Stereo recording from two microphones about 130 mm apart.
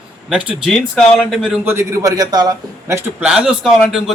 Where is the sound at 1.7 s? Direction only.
20° right (ahead or behind).